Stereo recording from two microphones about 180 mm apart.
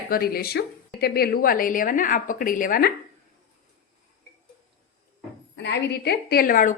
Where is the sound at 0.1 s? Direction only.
55° left (ahead or behind).